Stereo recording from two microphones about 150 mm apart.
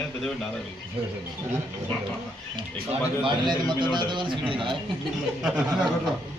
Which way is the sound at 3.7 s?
30° right (ahead or behind).